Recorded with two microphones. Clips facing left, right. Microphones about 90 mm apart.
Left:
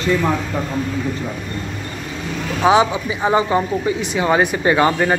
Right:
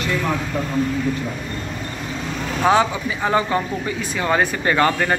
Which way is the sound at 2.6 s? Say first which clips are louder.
Left 3 dB; 15° left (ahead or behind).